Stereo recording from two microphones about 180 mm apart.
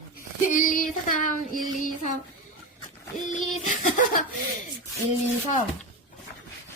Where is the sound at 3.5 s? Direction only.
45° left (ahead or behind).